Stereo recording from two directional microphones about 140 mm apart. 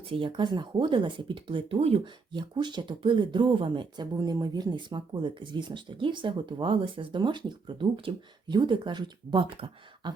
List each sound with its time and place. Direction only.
0.0 s speech: 40° right (ahead or behind)